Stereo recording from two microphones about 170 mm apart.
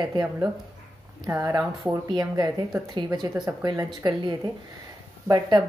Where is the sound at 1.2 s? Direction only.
20° right (ahead or behind).